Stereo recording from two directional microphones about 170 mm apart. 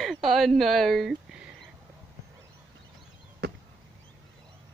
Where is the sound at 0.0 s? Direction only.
Centre (ahead or behind).